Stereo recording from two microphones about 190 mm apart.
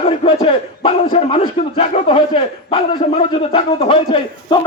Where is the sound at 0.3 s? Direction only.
30° left (ahead or behind).